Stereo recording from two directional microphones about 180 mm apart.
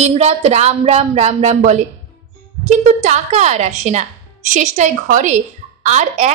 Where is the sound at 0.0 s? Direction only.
35° right (ahead or behind).